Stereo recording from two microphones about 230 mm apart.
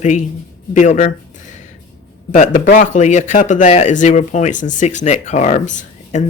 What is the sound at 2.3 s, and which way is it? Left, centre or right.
Speech, left.